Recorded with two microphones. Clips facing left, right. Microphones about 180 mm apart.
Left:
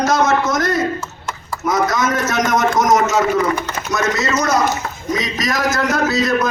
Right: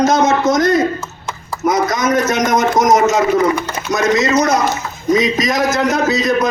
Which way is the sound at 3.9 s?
15° right (ahead or behind).